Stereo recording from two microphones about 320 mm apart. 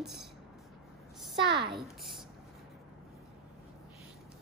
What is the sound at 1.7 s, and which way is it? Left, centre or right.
Speech, centre.